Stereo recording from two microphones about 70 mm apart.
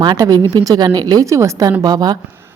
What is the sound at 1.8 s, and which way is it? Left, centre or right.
Speech, right.